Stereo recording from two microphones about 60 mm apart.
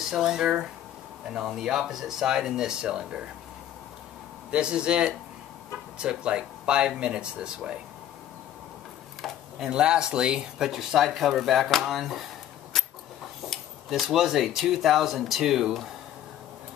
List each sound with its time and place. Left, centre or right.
0.1 s speech: centre
4.5 s speech: centre
9.2 s speech: centre
12.7 s a sound: centre
13.5 s speech: centre